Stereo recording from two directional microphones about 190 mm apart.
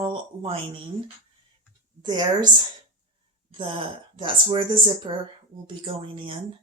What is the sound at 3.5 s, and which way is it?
Speech, 25° right (ahead or behind).